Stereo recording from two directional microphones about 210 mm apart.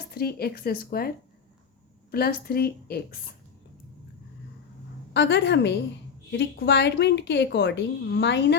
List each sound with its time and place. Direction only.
0.1 s a woman's voice: 45° left (ahead or behind)
5.1 s a woman's voice: 55° left (ahead or behind)